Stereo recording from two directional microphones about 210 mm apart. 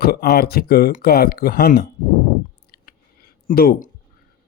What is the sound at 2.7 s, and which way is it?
Clicking, 45° left (ahead or behind).